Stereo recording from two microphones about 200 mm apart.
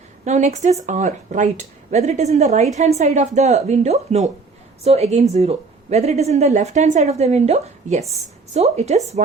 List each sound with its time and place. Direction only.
0.3 s speech: 35° right (ahead or behind)